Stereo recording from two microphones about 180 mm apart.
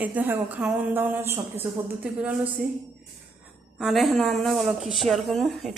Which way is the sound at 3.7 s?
Centre (ahead or behind).